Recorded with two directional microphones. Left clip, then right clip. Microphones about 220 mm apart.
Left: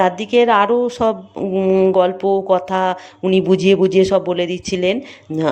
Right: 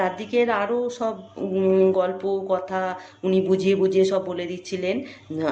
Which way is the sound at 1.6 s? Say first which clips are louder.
Left 5 dB; 25° left (ahead or behind).